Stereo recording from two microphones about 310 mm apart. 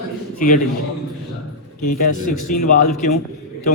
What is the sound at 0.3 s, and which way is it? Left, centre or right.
Speech, left.